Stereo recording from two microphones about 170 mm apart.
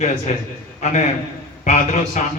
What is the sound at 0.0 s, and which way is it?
Speech, 45° left (ahead or behind).